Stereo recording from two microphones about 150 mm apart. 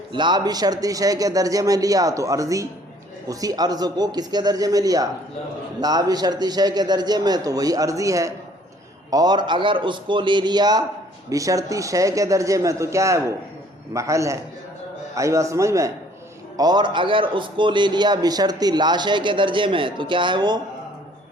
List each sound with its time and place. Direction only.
0.1 s a man's voice: 30° right (ahead or behind)